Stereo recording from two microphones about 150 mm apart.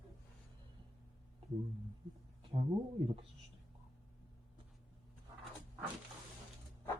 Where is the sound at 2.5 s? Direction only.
40° right (ahead or behind).